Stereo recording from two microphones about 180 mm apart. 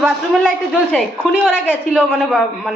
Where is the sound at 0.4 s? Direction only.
5° left (ahead or behind).